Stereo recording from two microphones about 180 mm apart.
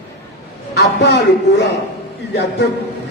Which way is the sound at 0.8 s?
70° left (ahead or behind).